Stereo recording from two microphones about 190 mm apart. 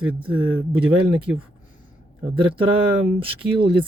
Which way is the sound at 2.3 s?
25° right (ahead or behind).